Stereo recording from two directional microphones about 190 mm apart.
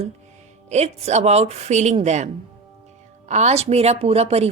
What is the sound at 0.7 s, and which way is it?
Speech, 35° right (ahead or behind).